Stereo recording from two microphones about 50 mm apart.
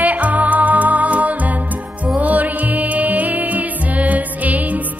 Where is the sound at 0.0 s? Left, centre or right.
Right.